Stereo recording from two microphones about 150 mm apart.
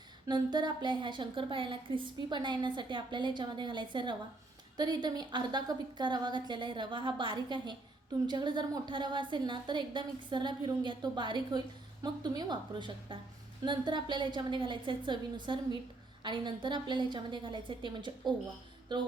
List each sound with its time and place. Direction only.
0.3 s a woman's voice: 30° right (ahead or behind)